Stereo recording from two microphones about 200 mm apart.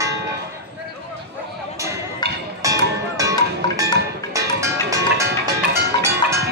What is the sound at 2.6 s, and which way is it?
Music, 15° right (ahead or behind).